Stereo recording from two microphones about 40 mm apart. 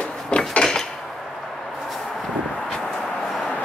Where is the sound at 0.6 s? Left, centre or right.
Centre.